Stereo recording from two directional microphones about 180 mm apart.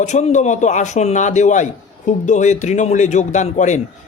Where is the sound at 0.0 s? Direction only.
40° left (ahead or behind).